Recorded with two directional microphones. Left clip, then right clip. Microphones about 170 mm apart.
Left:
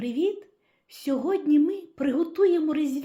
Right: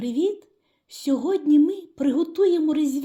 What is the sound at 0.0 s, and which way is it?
A woman's voice, 45° right (ahead or behind).